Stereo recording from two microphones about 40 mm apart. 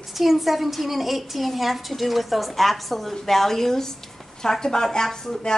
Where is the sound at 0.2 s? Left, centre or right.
Centre.